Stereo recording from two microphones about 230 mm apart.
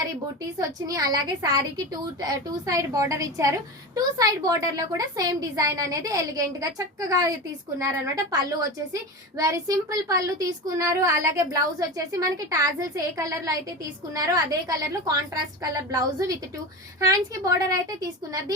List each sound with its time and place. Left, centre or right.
0.6 s speech: centre